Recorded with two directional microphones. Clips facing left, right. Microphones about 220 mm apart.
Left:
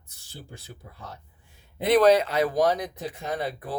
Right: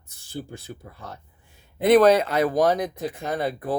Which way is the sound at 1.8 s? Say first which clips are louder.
Right 3 dB; 50° right (ahead or behind).